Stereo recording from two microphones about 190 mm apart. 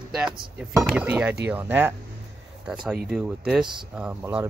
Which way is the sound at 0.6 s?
15° right (ahead or behind).